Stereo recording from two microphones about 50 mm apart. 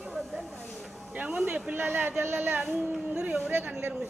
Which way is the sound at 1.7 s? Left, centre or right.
Right.